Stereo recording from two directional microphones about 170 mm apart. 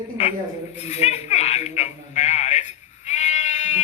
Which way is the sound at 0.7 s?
40° left (ahead or behind).